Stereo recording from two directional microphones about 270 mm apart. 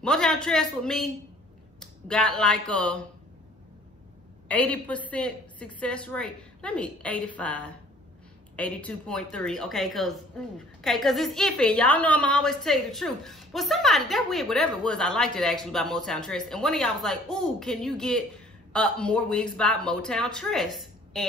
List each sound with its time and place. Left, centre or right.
0.0 s a woman's voice: centre
4.5 s a woman's voice: centre